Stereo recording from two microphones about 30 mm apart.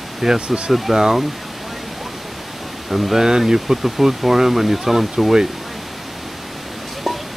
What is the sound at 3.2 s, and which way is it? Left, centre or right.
Speech, centre.